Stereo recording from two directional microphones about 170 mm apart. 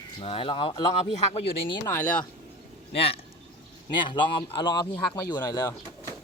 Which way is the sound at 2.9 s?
35° left (ahead or behind).